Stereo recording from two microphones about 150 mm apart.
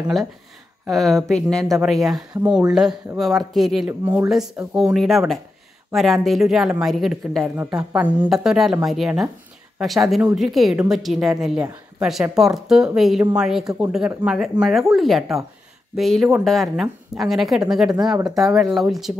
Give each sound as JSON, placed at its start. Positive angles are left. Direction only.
{"t": 0.8, "sound": "a woman's voice", "side_deg": 0}
{"t": 4.0, "sound": "speech", "side_deg": -15}
{"t": 4.7, "sound": "a woman's voice", "side_deg": 0}